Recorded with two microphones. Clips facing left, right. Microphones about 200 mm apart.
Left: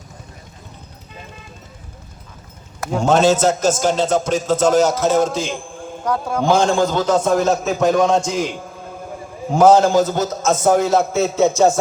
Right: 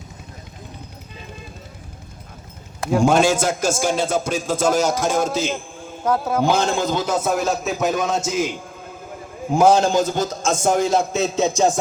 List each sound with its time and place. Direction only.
2.8 s a man's voice: 10° right (ahead or behind)
6.4 s a man's voice: 15° right (ahead or behind)
9.6 s a man's voice: 15° right (ahead or behind)